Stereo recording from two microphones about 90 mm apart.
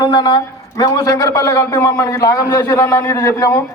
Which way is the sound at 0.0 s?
50° left (ahead or behind).